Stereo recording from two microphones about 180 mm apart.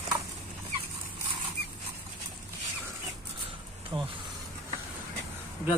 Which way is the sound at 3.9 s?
25° right (ahead or behind).